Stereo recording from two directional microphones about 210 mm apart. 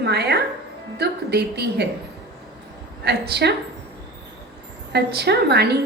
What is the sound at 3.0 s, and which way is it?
Speech, 50° right (ahead or behind).